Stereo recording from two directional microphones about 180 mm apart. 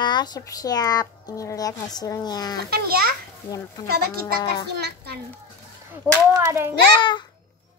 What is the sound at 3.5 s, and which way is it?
Speech, 20° left (ahead or behind).